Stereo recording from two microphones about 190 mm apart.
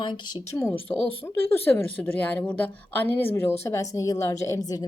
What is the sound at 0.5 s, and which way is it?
A woman's voice, 15° left (ahead or behind).